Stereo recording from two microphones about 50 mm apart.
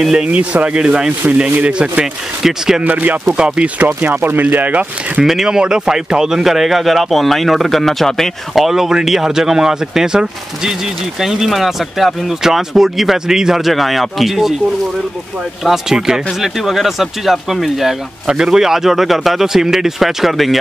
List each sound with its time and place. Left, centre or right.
0.0 s speech: centre
0.3 s rub: right
2.4 s speech: centre
2.8 s speech: right
3.3 s rub: centre
4.0 s speech: right
5.2 s speech: centre
15.6 s speech: centre